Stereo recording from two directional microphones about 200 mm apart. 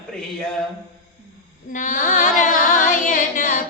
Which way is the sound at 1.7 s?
40° left (ahead or behind).